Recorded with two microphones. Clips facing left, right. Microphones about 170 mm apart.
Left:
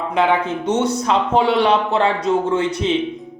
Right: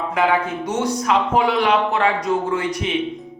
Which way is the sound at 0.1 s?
20° left (ahead or behind).